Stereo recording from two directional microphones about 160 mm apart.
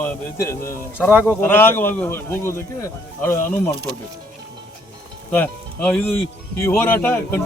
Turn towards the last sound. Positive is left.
turn(degrees=15)  # may be behind; listen again after turning